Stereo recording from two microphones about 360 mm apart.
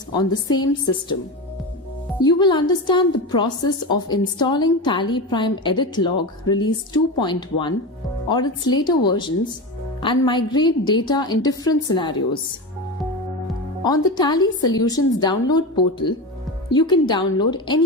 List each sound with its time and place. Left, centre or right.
0.1 s a woman's voice: centre
2.2 s a woman's voice: centre
14.2 s a woman's voice: centre